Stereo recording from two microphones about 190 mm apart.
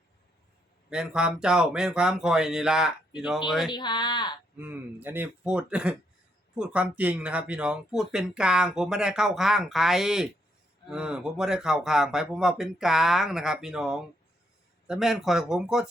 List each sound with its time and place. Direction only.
0.9 s speech: 5° right (ahead or behind)
3.7 s speech: 25° left (ahead or behind)
4.5 s speech: 10° right (ahead or behind)